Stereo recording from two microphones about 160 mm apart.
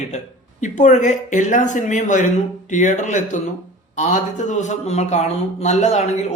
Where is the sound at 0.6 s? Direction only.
50° left (ahead or behind).